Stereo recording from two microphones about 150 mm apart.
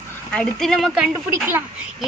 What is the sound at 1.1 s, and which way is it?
Speech, 15° right (ahead or behind).